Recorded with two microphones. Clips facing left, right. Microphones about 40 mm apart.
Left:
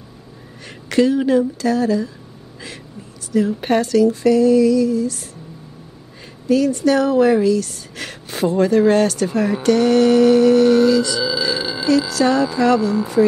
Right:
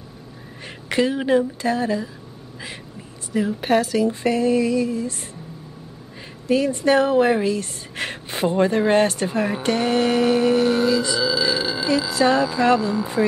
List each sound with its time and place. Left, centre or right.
0.7 s a sound: centre
1.6 s speech: right
3.4 s a woman's voice: centre
3.9 s speech: right
6.5 s speech: right
11.2 s burping: centre
12.1 s a sound: centre
12.6 s speech: right